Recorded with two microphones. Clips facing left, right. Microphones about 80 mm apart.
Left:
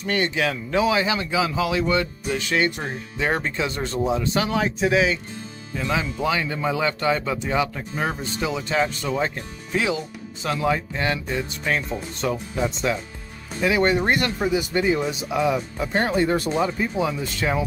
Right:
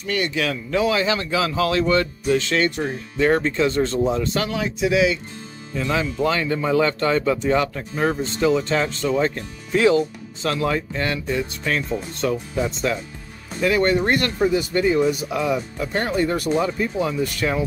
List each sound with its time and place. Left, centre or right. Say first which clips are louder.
0.0 s speech: even; left
4.6 s speech: right 1 dB; left
5.8 s speech: right 3 dB; centre
13.6 s speech: right 1 dB; centre